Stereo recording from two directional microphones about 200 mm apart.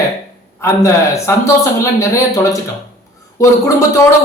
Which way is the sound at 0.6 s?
15° left (ahead or behind).